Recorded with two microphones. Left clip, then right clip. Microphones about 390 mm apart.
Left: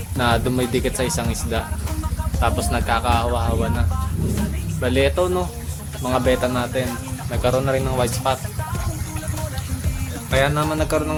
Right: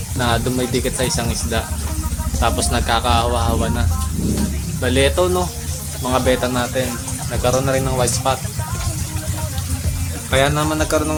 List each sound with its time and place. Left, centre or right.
0.2 s speech: left
10.3 s speech: left